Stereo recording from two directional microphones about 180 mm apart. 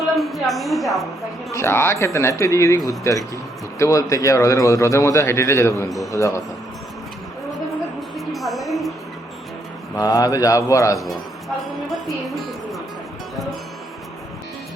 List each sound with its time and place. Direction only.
0.2 s speech: centre (ahead or behind)
1.5 s a man's voice: 15° left (ahead or behind)
8.3 s music: centre (ahead or behind)
9.9 s speech: 20° left (ahead or behind)
10.9 s speech: centre (ahead or behind)